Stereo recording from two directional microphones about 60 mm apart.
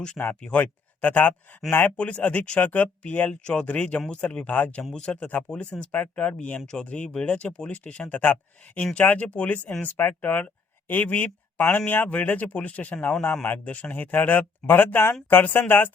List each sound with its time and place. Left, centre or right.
0.4 s speech: left